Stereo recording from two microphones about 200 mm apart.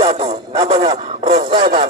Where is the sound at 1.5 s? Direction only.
30° right (ahead or behind).